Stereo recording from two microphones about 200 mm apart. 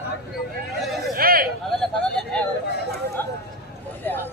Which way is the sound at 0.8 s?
Centre (ahead or behind).